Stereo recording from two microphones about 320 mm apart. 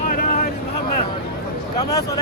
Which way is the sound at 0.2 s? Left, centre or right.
Left.